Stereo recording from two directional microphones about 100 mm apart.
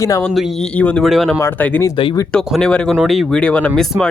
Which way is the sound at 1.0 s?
Centre (ahead or behind).